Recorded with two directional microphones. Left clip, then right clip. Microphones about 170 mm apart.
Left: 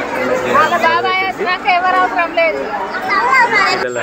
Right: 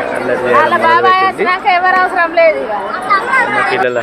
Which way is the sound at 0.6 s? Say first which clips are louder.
Right 3 dB; 25° right (ahead or behind).